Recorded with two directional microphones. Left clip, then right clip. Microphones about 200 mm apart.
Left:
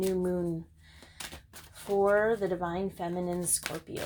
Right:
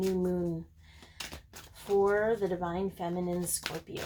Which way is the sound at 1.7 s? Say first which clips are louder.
Left 2 dB; 35° left (ahead or behind).